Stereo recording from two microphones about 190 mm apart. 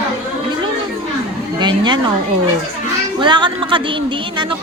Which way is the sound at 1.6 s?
25° right (ahead or behind).